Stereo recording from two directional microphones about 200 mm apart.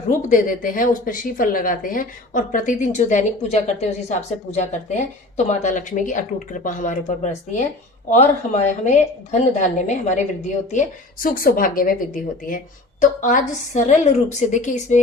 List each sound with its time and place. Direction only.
0.1 s a woman's voice: 40° left (ahead or behind)